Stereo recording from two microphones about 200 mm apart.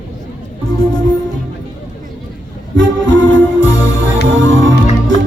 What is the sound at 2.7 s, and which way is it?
Music, 70° right (ahead or behind).